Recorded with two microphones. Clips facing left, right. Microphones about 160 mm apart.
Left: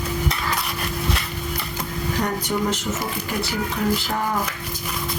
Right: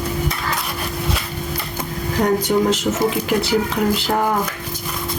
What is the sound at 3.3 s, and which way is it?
Speech, 90° right.